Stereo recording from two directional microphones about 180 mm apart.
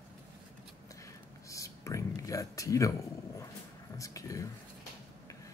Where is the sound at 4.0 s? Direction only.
20° left (ahead or behind).